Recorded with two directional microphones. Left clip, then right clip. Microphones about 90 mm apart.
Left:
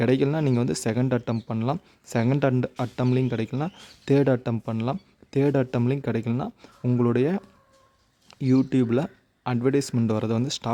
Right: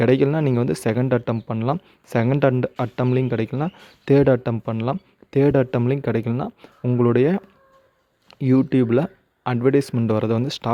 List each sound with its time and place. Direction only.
0.0 s speech: 20° right (ahead or behind)